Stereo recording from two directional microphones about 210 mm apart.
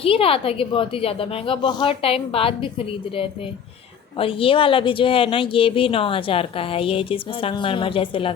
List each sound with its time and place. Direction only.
0.0 s speech: 25° left (ahead or behind)